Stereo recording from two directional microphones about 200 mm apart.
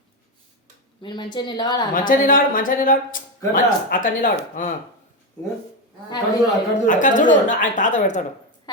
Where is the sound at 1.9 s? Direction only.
40° left (ahead or behind).